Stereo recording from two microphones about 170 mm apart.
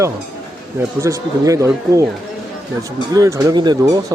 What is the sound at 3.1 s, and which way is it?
Speech, 20° right (ahead or behind).